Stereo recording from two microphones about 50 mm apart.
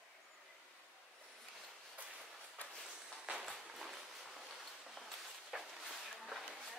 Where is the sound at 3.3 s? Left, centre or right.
Centre.